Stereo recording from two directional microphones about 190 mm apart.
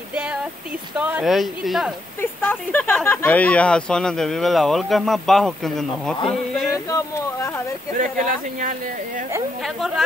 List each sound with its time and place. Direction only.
0.9 s speech: 10° right (ahead or behind)
2.4 s speech: 10° left (ahead or behind)
6.7 s speech: 15° left (ahead or behind)
8.0 s speech: 45° right (ahead or behind)
9.8 s speech: 5° right (ahead or behind)